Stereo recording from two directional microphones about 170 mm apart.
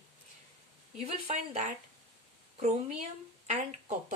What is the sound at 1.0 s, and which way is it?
Speech, 45° right (ahead or behind).